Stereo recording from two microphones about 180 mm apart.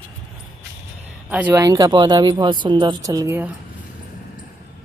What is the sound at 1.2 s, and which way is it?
Speech, 10° right (ahead or behind).